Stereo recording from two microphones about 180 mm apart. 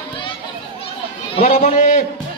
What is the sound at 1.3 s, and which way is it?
Speech, 40° left (ahead or behind).